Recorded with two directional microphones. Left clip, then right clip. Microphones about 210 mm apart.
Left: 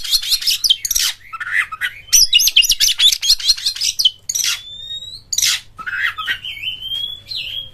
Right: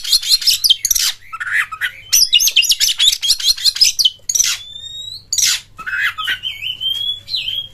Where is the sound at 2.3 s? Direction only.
10° left (ahead or behind).